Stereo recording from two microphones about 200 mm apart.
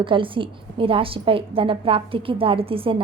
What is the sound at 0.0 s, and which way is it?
A woman's voice, 25° right (ahead or behind).